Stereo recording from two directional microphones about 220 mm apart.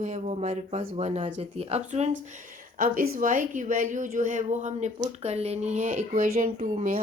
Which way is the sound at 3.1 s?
35° right (ahead or behind).